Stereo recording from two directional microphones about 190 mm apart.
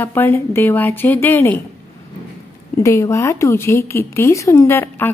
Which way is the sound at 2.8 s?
15° left (ahead or behind).